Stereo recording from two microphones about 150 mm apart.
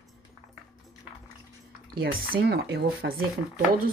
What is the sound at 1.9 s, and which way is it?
Speech, 90° right.